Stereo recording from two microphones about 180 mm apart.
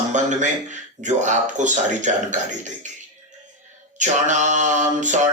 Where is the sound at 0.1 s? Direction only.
40° right (ahead or behind).